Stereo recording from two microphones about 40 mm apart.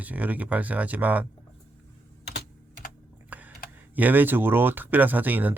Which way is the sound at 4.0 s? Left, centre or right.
Right.